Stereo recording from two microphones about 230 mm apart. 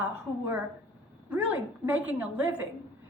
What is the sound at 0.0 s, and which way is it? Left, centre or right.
A woman's voice, centre.